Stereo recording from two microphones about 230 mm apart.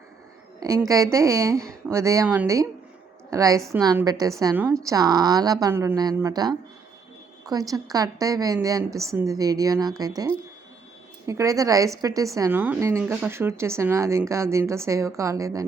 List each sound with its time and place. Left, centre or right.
0.9 s a woman's voice: centre